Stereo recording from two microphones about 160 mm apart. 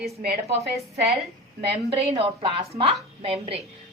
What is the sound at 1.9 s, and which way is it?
Speech, 40° right (ahead or behind).